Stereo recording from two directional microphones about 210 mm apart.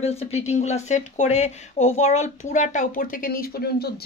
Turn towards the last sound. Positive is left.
turn(degrees=45)  # may be behind; listen again after turning